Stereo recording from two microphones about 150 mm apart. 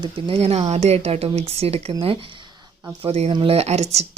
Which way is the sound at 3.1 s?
40° right (ahead or behind).